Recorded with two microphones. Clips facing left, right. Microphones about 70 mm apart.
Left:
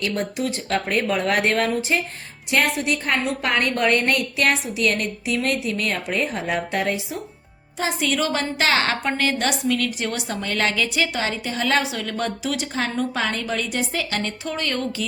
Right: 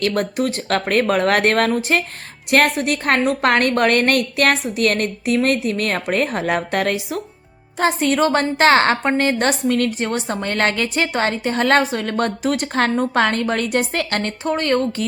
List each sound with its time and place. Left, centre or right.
0.0 s a woman's voice: right
7.8 s a woman's voice: right